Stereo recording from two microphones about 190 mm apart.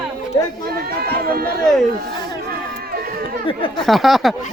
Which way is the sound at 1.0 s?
50° right (ahead or behind).